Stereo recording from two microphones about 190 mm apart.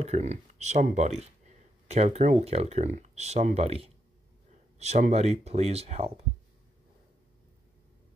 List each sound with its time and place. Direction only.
0.0 s speech: 35° right (ahead or behind)